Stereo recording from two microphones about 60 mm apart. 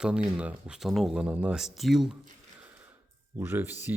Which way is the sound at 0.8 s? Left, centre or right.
Centre.